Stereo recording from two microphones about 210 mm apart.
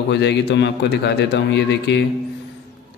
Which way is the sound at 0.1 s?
55° left (ahead or behind).